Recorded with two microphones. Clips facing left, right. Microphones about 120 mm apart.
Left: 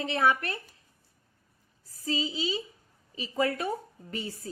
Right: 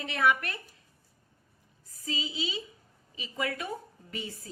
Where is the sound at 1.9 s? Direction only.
35° left (ahead or behind).